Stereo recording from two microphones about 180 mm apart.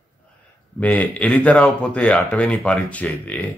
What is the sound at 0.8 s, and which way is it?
Speech, 10° left (ahead or behind).